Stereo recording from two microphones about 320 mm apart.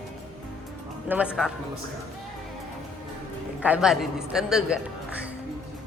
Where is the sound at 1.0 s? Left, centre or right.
Centre.